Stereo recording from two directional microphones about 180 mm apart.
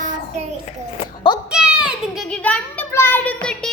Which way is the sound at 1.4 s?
5° right (ahead or behind).